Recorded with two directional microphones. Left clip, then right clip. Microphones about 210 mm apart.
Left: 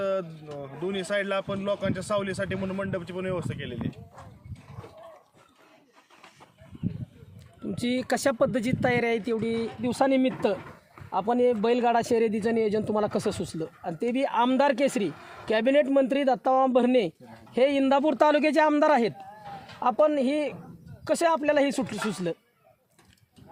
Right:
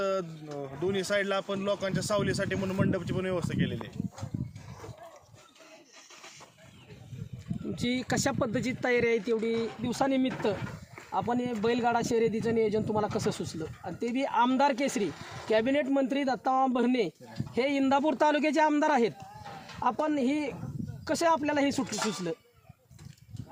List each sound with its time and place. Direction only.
0.0 s a sound: 5° right (ahead or behind)
0.6 s speech: 5° right (ahead or behind)
7.8 s a man's voice: 50° left (ahead or behind)
15.1 s speech: 50° right (ahead or behind)
15.4 s a man's voice: 50° left (ahead or behind)